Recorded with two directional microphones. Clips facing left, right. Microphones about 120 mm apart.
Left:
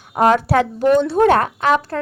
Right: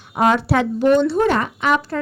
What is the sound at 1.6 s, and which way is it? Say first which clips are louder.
Speech: left 1 dB; 35° left (ahead or behind).